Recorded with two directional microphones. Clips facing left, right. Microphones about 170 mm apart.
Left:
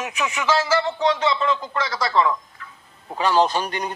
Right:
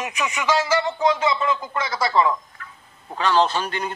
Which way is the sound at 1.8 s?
25° right (ahead or behind).